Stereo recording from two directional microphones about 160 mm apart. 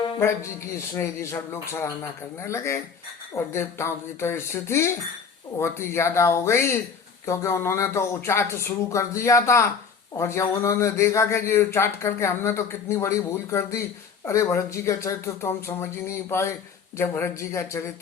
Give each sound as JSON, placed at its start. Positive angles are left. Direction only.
{"t": 0.2, "sound": "speech", "side_deg": 15}